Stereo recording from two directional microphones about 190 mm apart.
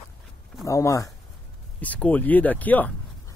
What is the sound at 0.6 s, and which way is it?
Speech, 15° left (ahead or behind).